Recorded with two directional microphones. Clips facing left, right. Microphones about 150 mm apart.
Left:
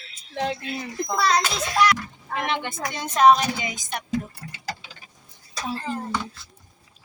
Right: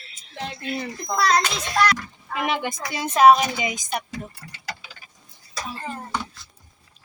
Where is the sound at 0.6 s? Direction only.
Centre (ahead or behind); by 4.0 s 15° right (ahead or behind).